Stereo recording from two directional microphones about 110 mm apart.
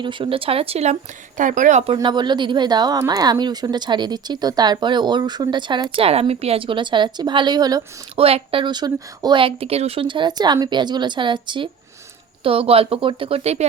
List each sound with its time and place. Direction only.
0.0 s speech: 50° right (ahead or behind); by 0.9 s 75° right (ahead or behind)
1.9 s a woman's voice: 45° right (ahead or behind)
6.1 s a woman's voice: 70° right (ahead or behind); by 7.8 s 40° right (ahead or behind)
8.1 s a woman's voice: 60° right (ahead or behind); by 9.4 s 40° right (ahead or behind)
9.4 s a woman's voice: 60° right (ahead or behind)